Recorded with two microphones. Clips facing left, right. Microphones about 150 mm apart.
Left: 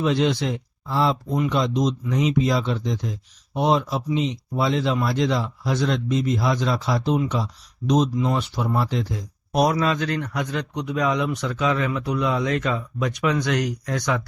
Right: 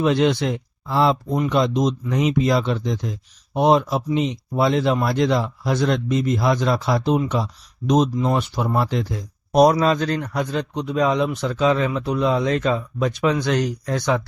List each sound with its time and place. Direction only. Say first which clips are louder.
0.0 s speech: right 3 dB; 55° right (ahead or behind)
9.6 s speech: right 4 dB; 35° right (ahead or behind)